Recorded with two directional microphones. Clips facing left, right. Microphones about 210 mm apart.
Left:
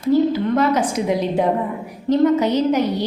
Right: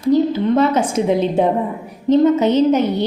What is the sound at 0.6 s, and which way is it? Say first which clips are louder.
A woman's voice: right 3 dB; 25° right (ahead or behind).